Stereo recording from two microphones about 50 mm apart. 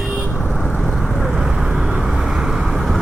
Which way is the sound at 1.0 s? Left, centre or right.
Centre.